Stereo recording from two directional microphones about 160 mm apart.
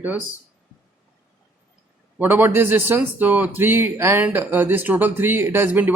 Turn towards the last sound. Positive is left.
turn(degrees=-10)  # may be behind; listen again after turning